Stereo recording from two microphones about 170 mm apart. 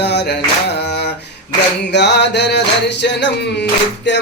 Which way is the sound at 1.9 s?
90° left.